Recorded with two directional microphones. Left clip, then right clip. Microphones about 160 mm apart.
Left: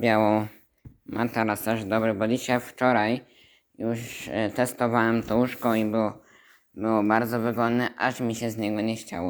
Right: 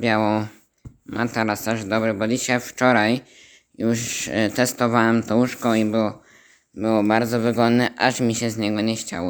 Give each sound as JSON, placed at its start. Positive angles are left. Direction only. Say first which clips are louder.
{"t": 0.0, "sound": "speech", "louder": "right 1 dB", "side_deg": -5}
{"t": 2.7, "sound": "speech", "louder": "right 5 dB", "side_deg": -35}
{"t": 3.8, "sound": "a man's voice", "louder": "right 7 dB", "side_deg": -50}